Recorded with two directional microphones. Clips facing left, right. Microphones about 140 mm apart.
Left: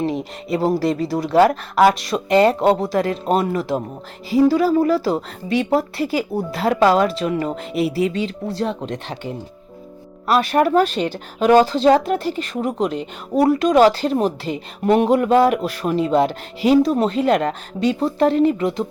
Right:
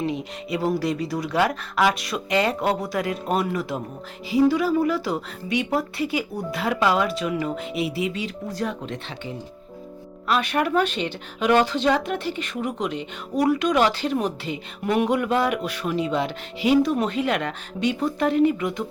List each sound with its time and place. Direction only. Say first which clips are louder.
0.0 s speech: left 4 dB; 40° left (ahead or behind)
10.2 s speech: left 6 dB; 40° left (ahead or behind)